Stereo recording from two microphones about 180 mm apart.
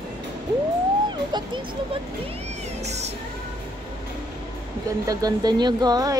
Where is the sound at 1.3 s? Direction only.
25° right (ahead or behind).